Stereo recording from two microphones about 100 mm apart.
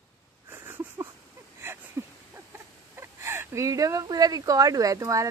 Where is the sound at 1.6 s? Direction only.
25° right (ahead or behind).